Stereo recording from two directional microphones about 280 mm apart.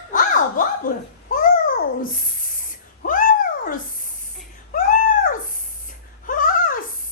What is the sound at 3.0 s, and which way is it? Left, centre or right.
Cat, left.